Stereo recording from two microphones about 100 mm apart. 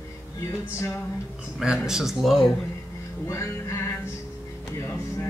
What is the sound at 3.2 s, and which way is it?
Music, 30° left (ahead or behind).